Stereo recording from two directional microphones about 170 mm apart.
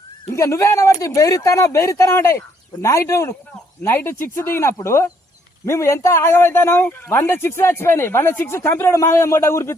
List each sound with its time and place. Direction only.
0.3 s a man's voice: 15° left (ahead or behind)